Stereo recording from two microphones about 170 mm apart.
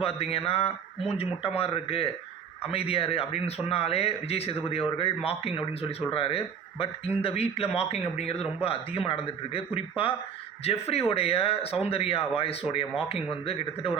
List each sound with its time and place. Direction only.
0.0 s a man's voice: 35° left (ahead or behind)